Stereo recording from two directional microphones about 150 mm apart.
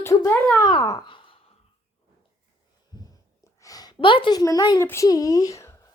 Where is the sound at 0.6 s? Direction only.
25° left (ahead or behind).